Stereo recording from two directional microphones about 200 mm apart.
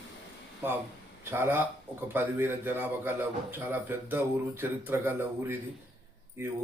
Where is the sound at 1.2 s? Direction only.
10° right (ahead or behind).